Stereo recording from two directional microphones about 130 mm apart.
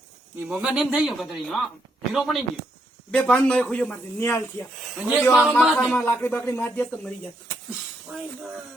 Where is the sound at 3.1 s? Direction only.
10° left (ahead or behind).